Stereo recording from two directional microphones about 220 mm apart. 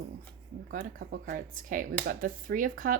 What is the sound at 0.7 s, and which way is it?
Speech, 35° right (ahead or behind).